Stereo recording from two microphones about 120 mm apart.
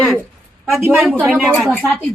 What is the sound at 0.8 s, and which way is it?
Speech, 20° right (ahead or behind).